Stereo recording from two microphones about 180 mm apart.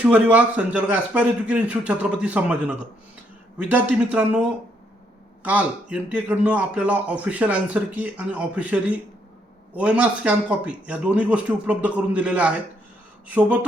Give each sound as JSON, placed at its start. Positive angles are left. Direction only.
{"t": 0.0, "sound": "speech", "side_deg": -10}